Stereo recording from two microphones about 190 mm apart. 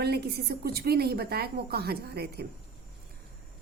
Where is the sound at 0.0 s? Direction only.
55° right (ahead or behind).